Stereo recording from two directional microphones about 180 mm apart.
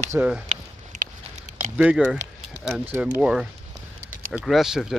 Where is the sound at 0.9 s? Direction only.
45° right (ahead or behind).